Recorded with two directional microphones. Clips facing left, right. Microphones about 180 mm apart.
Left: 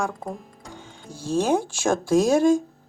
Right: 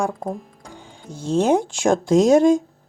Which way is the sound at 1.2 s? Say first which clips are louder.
Right 4 dB; 20° right (ahead or behind).